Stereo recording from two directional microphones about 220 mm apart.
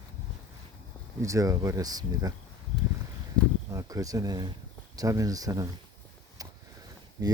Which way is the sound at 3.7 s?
15° right (ahead or behind).